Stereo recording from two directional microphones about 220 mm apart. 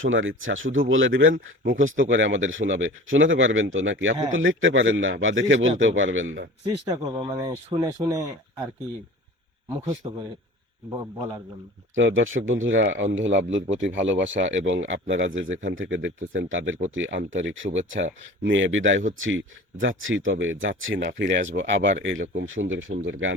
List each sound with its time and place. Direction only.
0.0 s speech: 60° right (ahead or behind)
6.7 s speech: 20° right (ahead or behind)
9.6 s speech: 15° right (ahead or behind)
11.9 s speech: 60° right (ahead or behind)